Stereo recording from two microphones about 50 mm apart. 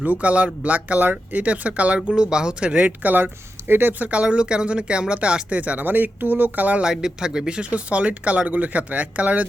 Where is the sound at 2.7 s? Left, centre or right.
Right.